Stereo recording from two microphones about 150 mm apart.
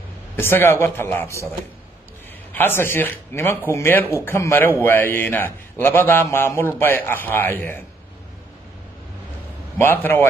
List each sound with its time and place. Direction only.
0.4 s a man's voice: 15° left (ahead or behind)
2.5 s a man's voice: 15° left (ahead or behind)
9.8 s a man's voice: 15° left (ahead or behind)